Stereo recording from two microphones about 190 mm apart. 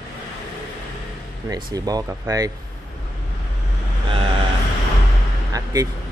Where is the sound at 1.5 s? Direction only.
20° right (ahead or behind).